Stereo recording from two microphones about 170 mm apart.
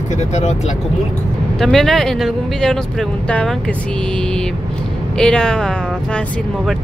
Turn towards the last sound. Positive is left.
turn(degrees=5)  # may be behind; listen again after turning